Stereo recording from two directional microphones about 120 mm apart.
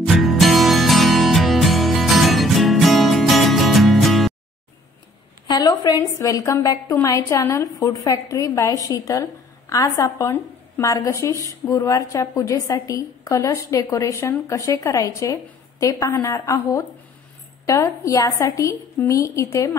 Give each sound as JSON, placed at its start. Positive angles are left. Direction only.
{"t": 0.0, "sound": "music", "side_deg": 0}
{"t": 5.5, "sound": "a woman's voice", "side_deg": 35}